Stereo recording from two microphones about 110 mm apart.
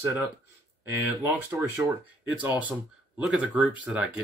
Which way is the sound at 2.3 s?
15° right (ahead or behind).